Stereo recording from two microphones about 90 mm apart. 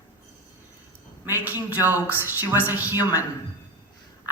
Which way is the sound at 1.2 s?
20° right (ahead or behind).